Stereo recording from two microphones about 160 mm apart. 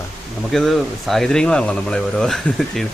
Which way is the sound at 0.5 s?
Centre (ahead or behind).